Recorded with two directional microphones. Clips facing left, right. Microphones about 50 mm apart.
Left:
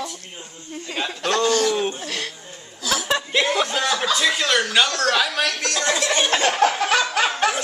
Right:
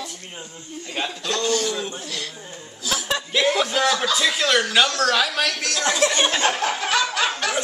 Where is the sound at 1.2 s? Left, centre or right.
Left.